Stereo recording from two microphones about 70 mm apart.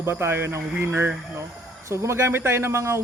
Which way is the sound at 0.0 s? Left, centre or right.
Right.